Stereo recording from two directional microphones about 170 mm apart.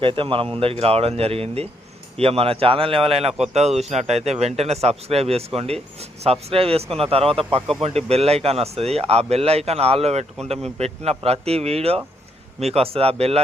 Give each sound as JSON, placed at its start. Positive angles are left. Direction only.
{"t": 0.0, "sound": "speech", "side_deg": -30}